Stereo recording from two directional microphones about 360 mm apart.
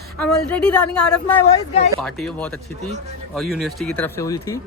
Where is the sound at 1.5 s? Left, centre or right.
Centre.